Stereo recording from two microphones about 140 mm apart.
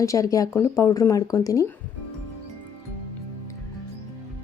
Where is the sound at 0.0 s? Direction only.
25° left (ahead or behind).